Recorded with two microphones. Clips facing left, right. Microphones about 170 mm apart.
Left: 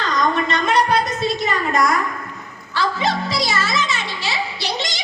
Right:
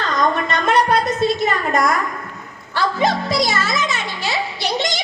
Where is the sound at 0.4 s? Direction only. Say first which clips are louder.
Right 1 dB; 50° right (ahead or behind).